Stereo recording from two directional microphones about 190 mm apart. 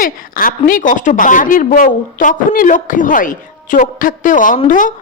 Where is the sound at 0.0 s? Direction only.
50° left (ahead or behind).